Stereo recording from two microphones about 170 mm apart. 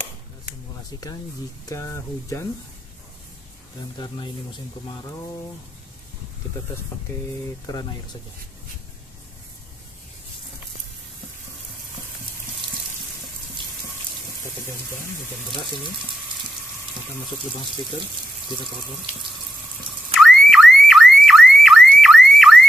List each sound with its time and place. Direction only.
1.7 s speech: 15° left (ahead or behind)
4.8 s speech: 25° left (ahead or behind)
7.6 s speech: 25° left (ahead or behind)
17.6 s speech: centre (ahead or behind)
20.2 s car alarm: centre (ahead or behind)